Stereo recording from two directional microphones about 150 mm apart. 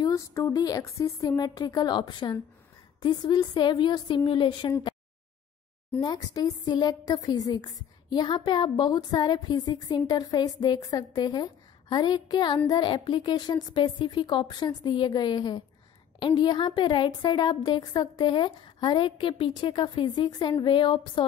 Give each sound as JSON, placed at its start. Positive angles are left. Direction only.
{"t": 0.0, "sound": "a woman's voice", "side_deg": 20}
{"t": 5.9, "sound": "a woman's voice", "side_deg": 25}